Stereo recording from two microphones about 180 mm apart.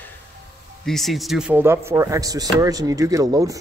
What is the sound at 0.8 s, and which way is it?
Speech, centre (ahead or behind).